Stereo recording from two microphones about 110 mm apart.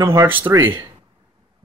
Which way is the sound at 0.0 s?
25° right (ahead or behind).